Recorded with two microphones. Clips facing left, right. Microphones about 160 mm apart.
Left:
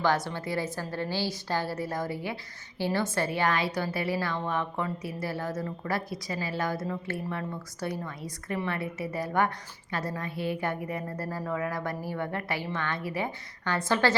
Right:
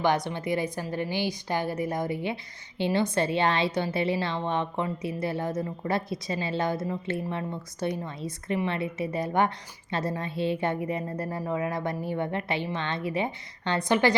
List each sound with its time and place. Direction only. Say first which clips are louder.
0.0 s a woman's voice: right 2 dB; 20° right (ahead or behind)